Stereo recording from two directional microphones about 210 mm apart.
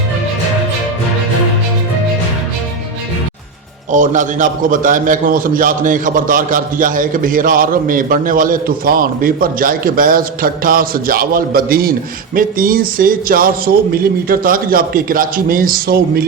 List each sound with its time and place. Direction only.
3.9 s a man's voice: 35° right (ahead or behind)